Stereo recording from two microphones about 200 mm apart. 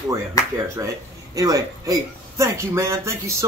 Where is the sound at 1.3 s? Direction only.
20° right (ahead or behind).